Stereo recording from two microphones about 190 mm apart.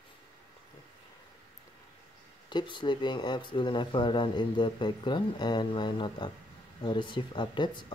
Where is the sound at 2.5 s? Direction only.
25° left (ahead or behind).